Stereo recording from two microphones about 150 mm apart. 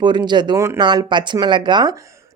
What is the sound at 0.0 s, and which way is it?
Speech, 30° right (ahead or behind).